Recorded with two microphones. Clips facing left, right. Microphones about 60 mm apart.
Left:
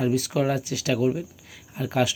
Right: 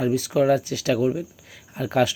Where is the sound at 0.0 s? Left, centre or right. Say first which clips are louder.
Right 3 dB; left.